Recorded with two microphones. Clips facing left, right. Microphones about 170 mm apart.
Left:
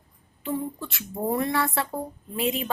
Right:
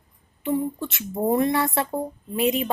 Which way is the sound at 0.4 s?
20° right (ahead or behind).